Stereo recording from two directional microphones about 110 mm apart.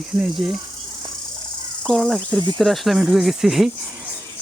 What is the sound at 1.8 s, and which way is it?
Speech, 5° left (ahead or behind).